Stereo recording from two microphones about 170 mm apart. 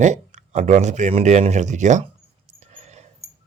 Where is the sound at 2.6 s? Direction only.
45° right (ahead or behind).